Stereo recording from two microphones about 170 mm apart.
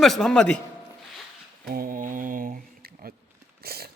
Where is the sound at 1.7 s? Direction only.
55° right (ahead or behind).